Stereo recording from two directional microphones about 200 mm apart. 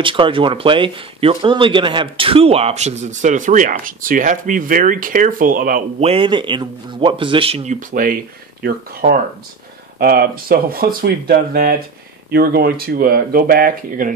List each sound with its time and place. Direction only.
0.0 s speech: 25° right (ahead or behind); by 14.1 s 45° right (ahead or behind)